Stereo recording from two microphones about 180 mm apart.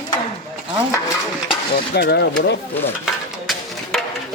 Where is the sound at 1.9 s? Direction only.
70° left (ahead or behind).